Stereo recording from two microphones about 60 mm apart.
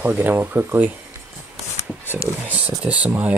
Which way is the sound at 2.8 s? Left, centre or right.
Right.